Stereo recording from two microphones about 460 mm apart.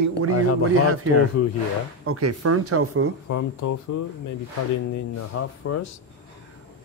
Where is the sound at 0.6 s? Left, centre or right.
Right.